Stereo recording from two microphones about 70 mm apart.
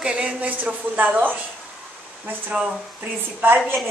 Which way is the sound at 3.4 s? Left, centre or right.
Right.